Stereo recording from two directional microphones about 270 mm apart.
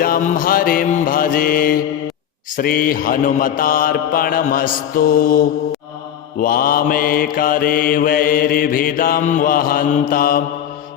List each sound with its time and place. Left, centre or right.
0.0 s mantra: left